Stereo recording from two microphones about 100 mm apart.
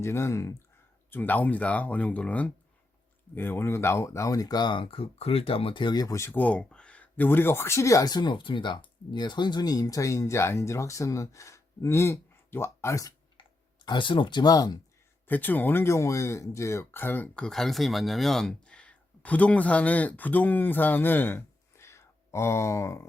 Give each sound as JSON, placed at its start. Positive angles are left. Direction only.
{"t": 0.0, "sound": "speech", "side_deg": 25}
{"t": 1.1, "sound": "speech", "side_deg": 15}
{"t": 6.3, "sound": "speech", "side_deg": 15}
{"t": 13.3, "sound": "speech", "side_deg": 50}
{"t": 15.3, "sound": "speech", "side_deg": 20}
{"t": 17.3, "sound": "speech", "side_deg": 5}